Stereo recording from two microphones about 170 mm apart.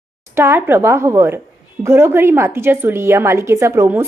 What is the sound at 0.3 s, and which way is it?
A woman's voice, 15° right (ahead or behind).